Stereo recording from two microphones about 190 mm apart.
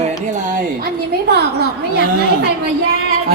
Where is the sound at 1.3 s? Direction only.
60° right (ahead or behind).